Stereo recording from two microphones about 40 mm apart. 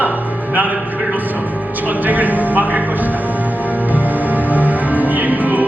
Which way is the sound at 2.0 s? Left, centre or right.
Right.